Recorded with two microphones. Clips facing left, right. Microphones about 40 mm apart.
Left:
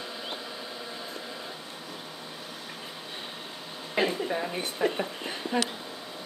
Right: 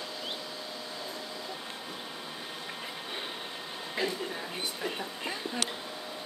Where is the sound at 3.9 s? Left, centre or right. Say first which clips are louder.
Left 6 dB; left.